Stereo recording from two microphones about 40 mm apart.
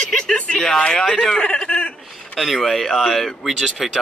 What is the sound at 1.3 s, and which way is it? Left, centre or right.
Speech, left.